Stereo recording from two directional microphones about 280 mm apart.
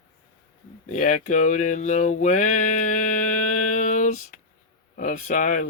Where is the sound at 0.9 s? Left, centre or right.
Left.